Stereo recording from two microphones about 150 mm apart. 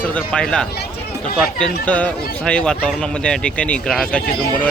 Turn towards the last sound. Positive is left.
turn(degrees=80)